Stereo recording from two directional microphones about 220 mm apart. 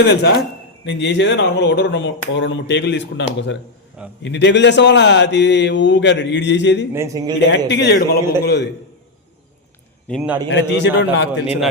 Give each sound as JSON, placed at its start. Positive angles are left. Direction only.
{"t": 0.0, "sound": "speech", "side_deg": 50}
{"t": 6.9, "sound": "a man's voice", "side_deg": -15}
{"t": 7.5, "sound": "speech", "side_deg": 50}
{"t": 10.1, "sound": "a man's voice", "side_deg": 0}
{"t": 10.5, "sound": "speech", "side_deg": 50}